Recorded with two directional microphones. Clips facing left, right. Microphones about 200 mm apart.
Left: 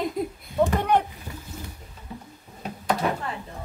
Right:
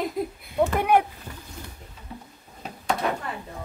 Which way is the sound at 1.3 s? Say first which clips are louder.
Left 2 dB; 10° left (ahead or behind).